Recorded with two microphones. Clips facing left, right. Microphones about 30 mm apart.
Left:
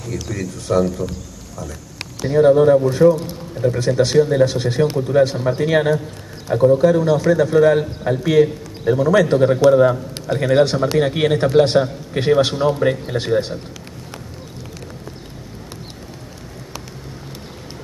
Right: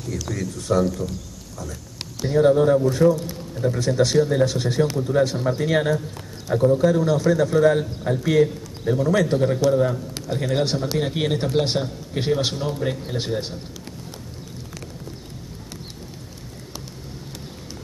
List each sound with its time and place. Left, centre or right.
0.0 s speech: centre
2.2 s speech: centre
9.7 s a man's voice: left